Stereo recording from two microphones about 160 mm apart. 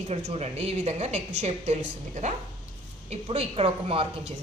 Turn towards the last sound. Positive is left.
turn(degrees=-35)  # may be behind; listen again after turning